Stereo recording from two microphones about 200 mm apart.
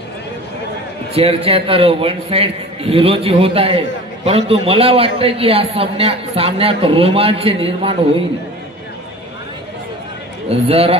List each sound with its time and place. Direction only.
1.1 s a man's voice: 30° right (ahead or behind)
10.5 s a man's voice: 30° right (ahead or behind)